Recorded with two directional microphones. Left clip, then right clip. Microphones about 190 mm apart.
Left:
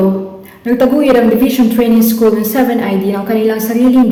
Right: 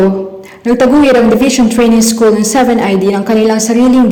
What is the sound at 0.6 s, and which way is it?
A woman's voice, 30° right (ahead or behind).